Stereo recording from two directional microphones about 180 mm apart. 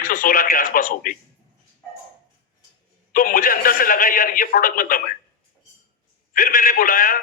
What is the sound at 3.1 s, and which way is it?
A man's voice, 50° left (ahead or behind).